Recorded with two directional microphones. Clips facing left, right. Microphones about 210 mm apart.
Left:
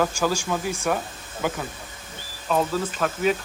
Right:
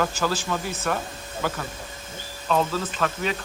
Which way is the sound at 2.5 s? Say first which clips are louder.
Left 1 dB; 10° left (ahead or behind).